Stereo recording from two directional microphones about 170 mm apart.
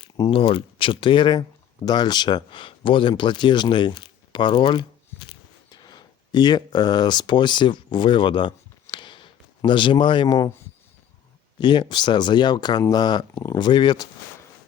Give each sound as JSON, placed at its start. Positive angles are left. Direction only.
{"t": 0.0, "sound": "speech", "side_deg": 30}
{"t": 11.6, "sound": "speech", "side_deg": 25}